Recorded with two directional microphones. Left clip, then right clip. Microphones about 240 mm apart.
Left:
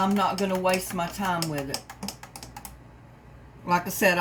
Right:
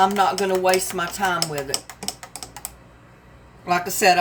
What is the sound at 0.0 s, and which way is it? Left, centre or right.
Speech, right.